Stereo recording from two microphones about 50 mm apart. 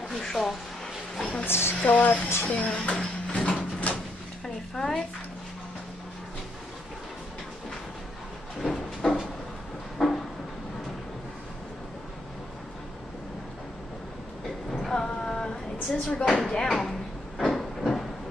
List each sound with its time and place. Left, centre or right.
0.1 s speech: centre
1.4 s speech: left
1.9 s speech: left
2.2 s speech: left
2.5 s speech: left
3.9 s a sound: left
4.7 s speech: centre
8.5 s a sound: centre
14.8 s a sound: centre